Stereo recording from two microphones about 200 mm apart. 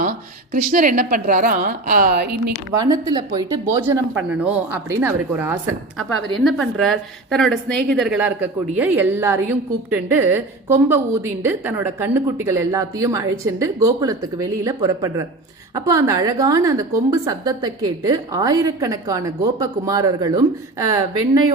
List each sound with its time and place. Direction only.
0.0 s a woman's voice: 45° right (ahead or behind)
2.7 s a woman's voice: 20° right (ahead or behind)
4.3 s a woman's voice: 10° right (ahead or behind)
6.4 s a woman's voice: centre (ahead or behind); by 21.0 s 15° right (ahead or behind)